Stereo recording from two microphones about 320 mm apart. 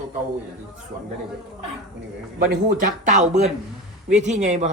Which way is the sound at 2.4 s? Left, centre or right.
Right.